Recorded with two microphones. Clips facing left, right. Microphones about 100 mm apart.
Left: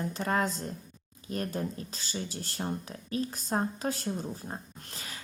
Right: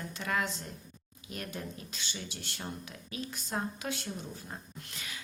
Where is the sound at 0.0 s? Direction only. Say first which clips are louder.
Left 5 dB; 35° left (ahead or behind).